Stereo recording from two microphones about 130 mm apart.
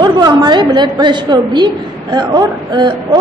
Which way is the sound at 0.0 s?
35° right (ahead or behind).